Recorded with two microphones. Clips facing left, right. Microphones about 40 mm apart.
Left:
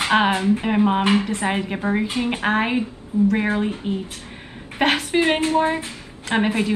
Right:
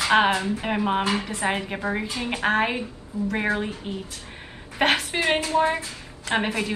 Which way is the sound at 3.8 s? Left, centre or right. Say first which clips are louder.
Left 6 dB; centre.